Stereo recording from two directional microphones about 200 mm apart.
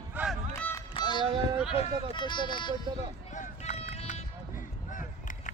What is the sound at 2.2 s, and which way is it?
Speech, 25° left (ahead or behind).